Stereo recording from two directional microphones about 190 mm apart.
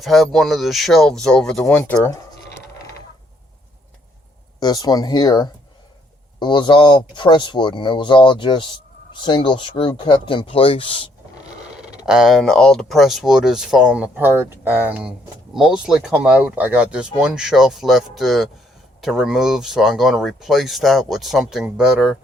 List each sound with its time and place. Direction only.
0.0 s speech: centre (ahead or behind); by 2.2 s 15° left (ahead or behind)
4.6 s speech: 20° left (ahead or behind)
12.0 s speech: 5° right (ahead or behind)